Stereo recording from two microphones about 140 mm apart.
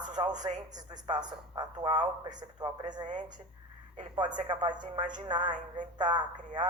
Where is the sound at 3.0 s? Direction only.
60° right (ahead or behind).